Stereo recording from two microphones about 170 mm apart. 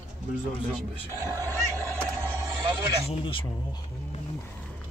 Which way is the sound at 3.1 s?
30° left (ahead or behind).